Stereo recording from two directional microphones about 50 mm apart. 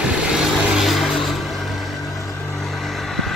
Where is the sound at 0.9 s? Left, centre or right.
Centre.